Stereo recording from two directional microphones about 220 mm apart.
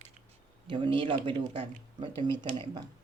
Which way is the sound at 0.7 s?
20° right (ahead or behind).